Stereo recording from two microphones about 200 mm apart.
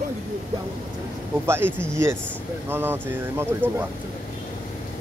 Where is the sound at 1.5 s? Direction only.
10° right (ahead or behind).